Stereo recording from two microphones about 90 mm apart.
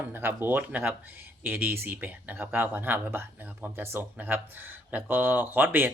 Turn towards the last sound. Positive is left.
turn(degrees=-20)  # may be behind; listen again after turning